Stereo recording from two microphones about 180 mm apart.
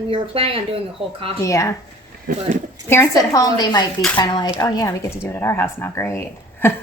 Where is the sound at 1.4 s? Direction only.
15° left (ahead or behind).